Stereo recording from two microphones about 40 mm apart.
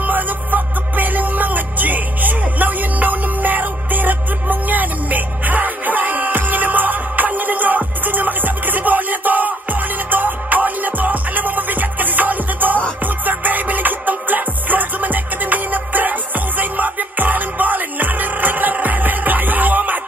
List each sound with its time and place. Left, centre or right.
0.0 s music: right